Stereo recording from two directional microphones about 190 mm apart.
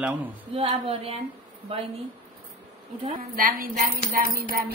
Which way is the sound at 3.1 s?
45° right (ahead or behind).